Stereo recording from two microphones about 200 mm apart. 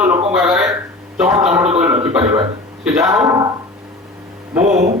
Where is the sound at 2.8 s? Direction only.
15° right (ahead or behind).